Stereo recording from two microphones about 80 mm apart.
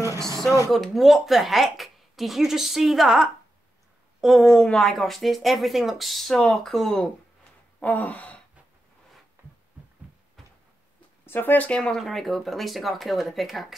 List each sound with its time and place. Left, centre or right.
0.7 s speech: centre
7.8 s speech: centre
9.4 s a sound: right
11.2 s speech: left; by 13.7 s centre